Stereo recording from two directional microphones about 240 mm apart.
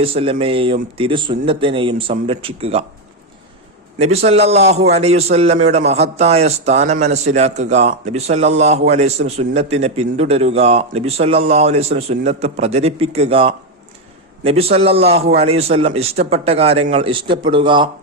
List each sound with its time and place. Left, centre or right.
0.0 s a man's voice: right
4.0 s a man's voice: right